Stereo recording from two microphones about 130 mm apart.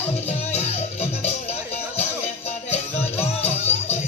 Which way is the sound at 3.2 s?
55° left (ahead or behind).